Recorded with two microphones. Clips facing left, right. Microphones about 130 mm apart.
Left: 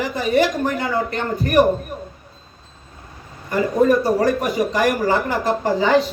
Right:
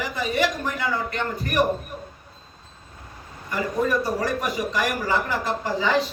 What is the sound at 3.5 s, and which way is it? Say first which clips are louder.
A man's voice: left 8 dB; 45° left (ahead or behind).